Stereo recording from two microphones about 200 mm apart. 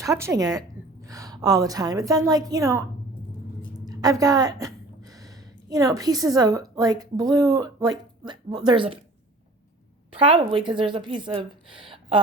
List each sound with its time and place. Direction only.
0.0 s a woman's voice: 15° right (ahead or behind)
3.8 s a woman's voice: 20° right (ahead or behind)
10.1 s a woman's voice: 25° right (ahead or behind)